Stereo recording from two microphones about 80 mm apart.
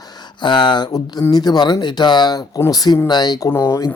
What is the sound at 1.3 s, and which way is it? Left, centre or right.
Speech, left.